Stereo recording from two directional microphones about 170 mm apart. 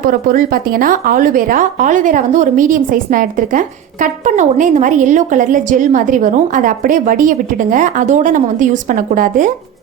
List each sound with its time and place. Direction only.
0.0 s speech: 55° right (ahead or behind)